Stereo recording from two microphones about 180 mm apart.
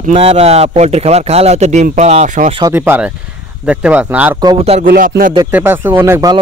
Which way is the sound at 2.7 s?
10° right (ahead or behind).